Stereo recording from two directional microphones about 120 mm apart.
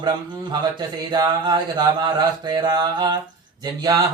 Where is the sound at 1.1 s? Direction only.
35° right (ahead or behind).